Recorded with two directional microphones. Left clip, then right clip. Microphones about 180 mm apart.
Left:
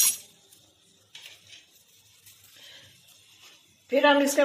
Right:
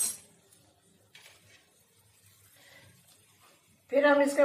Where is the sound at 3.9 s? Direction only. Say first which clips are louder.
Left 3 dB; 45° left (ahead or behind).